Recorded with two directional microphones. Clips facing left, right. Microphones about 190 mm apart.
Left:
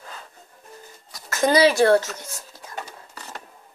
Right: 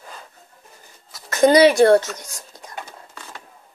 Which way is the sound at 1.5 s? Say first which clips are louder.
Right 4 dB; 25° right (ahead or behind).